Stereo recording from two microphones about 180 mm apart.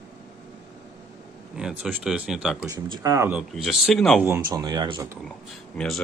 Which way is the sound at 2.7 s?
20° right (ahead or behind).